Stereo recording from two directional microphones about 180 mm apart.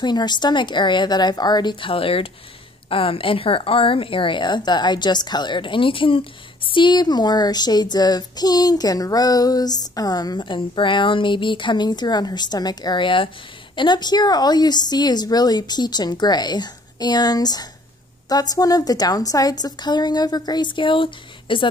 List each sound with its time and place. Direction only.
0.0 s a woman's voice: 25° left (ahead or behind)